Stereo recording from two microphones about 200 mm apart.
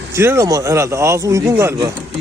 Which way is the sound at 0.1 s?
15° right (ahead or behind).